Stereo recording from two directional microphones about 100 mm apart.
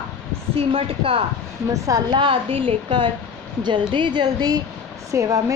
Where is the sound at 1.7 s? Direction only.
35° right (ahead or behind).